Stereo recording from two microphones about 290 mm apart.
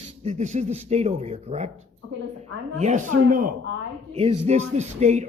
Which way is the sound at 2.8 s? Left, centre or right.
Right.